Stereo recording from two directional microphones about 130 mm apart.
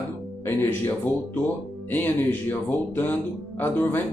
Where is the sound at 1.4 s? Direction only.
15° left (ahead or behind).